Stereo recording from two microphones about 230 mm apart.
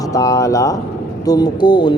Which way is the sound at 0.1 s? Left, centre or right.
Centre.